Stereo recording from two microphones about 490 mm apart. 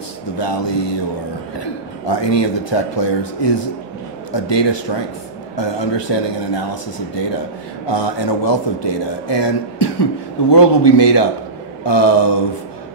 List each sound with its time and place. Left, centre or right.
0.4 s a man's voice: left